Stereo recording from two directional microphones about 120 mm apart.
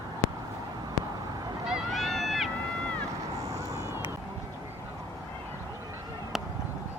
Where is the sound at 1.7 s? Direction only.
Centre (ahead or behind).